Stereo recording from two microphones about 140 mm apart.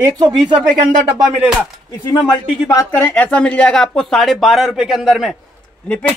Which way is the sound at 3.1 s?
10° left (ahead or behind).